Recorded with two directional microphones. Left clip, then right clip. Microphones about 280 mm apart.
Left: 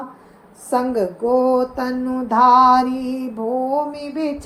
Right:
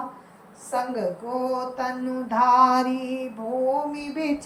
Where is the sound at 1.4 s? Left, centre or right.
Left.